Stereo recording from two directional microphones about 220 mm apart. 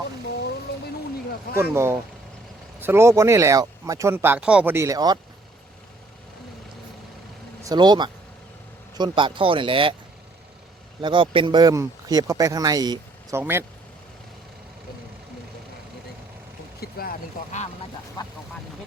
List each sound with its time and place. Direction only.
1.5 s speech: 10° right (ahead or behind)
7.6 s speech: 15° right (ahead or behind)
11.0 s speech: 20° right (ahead or behind)
16.8 s speech: 40° left (ahead or behind)
18.2 s speech: 20° left (ahead or behind)